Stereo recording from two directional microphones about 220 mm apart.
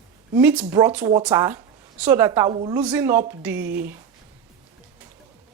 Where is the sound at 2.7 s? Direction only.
5° right (ahead or behind).